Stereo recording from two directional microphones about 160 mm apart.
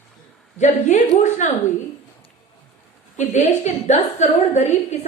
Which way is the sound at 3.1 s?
45° left (ahead or behind).